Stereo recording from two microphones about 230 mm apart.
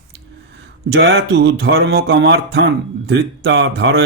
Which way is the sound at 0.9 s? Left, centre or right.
Right.